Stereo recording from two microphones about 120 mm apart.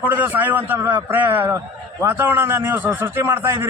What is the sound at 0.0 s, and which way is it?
A man's voice, 15° right (ahead or behind).